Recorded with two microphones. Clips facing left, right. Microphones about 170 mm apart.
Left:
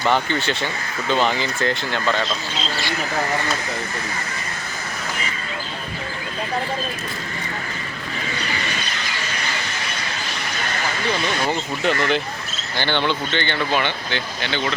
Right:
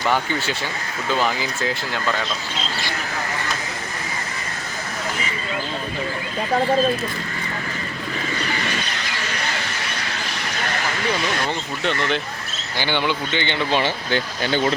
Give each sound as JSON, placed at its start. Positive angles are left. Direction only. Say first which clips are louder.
{"t": 0.0, "sound": "speech", "louder": "left 2 dB", "side_deg": -10}
{"t": 11.4, "sound": "speech", "louder": "left 3 dB", "side_deg": 5}
{"t": 12.7, "sound": "speech", "louder": "left 1 dB", "side_deg": -10}
{"t": 13.7, "sound": "speech", "louder": "right 2 dB", "side_deg": -40}